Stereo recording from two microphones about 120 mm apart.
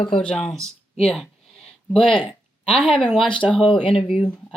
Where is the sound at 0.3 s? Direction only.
5° left (ahead or behind).